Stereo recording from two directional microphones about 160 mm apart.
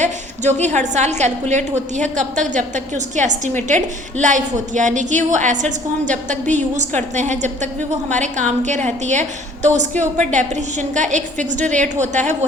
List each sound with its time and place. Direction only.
0.0 s a woman's voice: 45° right (ahead or behind)